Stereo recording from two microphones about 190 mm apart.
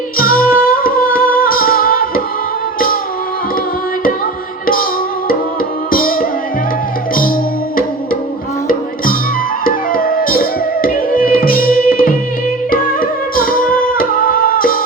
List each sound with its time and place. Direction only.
0.2 s singing: 50° left (ahead or behind)
4.6 s music: 50° left (ahead or behind)
5.9 s music: 50° left (ahead or behind)
9.6 s music: 50° left (ahead or behind)